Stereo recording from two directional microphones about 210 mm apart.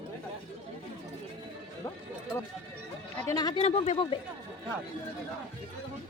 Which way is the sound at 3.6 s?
30° left (ahead or behind).